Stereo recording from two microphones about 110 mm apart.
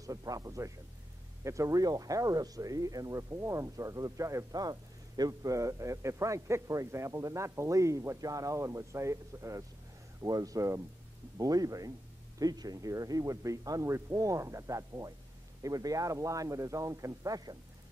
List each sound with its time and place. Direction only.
0.0 s speech: 30° right (ahead or behind)